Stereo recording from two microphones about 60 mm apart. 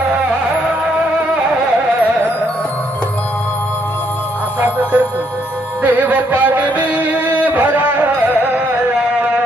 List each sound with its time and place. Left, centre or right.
4.6 s music: right